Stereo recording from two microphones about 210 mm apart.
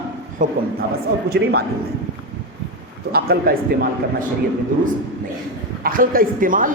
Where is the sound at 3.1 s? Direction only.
45° right (ahead or behind).